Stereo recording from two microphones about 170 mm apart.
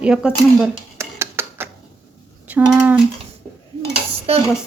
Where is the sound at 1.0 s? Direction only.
15° right (ahead or behind).